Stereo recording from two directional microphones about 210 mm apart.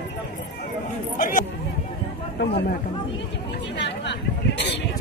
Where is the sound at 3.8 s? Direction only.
55° left (ahead or behind).